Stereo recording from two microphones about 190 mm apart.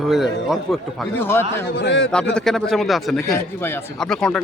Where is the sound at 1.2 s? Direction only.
10° left (ahead or behind).